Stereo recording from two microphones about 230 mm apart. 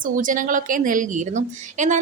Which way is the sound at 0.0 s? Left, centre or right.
Right.